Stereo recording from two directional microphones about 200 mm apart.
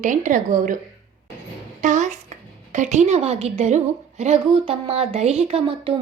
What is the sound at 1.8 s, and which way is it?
A woman's voice, 40° right (ahead or behind).